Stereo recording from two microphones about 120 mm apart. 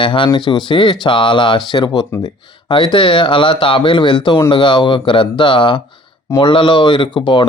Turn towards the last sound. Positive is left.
turn(degrees=40)  # may be behind; listen again after turning